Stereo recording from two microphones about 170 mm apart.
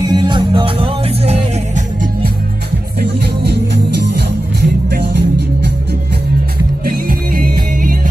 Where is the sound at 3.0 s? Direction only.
75° right (ahead or behind).